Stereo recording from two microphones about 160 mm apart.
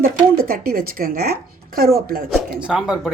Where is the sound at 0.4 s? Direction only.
70° right (ahead or behind).